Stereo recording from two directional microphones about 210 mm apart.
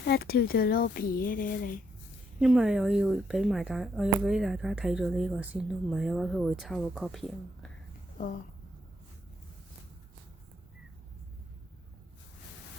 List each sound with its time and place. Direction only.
0.0 s speech: 50° left (ahead or behind)
2.4 s speech: 5° right (ahead or behind)